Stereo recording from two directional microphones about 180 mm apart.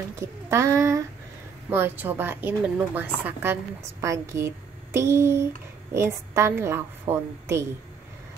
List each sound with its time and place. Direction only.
0.1 s a woman's voice: 15° right (ahead or behind)